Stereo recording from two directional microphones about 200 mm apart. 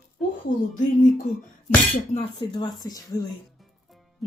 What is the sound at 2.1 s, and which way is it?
A woman's voice, 25° left (ahead or behind).